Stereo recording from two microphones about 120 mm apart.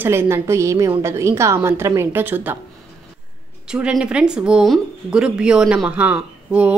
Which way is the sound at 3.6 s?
5° right (ahead or behind).